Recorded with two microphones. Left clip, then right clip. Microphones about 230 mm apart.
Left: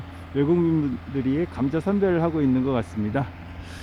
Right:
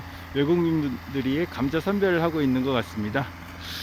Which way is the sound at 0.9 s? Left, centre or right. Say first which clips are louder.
Left 1 dB; right.